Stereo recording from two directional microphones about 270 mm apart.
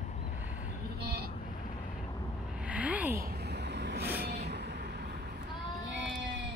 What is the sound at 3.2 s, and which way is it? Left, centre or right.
Vehicle, right.